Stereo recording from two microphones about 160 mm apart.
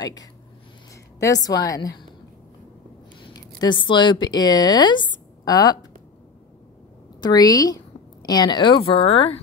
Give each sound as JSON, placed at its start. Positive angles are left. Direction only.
{"t": 0.0, "sound": "a woman's voice", "side_deg": 25}
{"t": 3.3, "sound": "a woman's voice", "side_deg": 25}
{"t": 7.2, "sound": "a woman's voice", "side_deg": 25}